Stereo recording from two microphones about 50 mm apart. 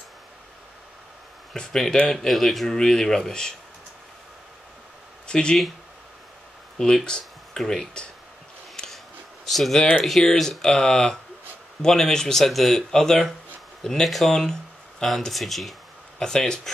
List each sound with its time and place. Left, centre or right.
1.5 s speech: centre
5.2 s speech: centre
6.8 s speech: centre
8.7 s a sound: centre
9.5 s speech: centre
14.3 s a sound: centre
15.0 s speech: centre
16.2 s speech: centre